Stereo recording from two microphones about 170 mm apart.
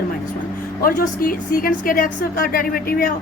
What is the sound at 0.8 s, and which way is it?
A woman's voice, 55° left (ahead or behind).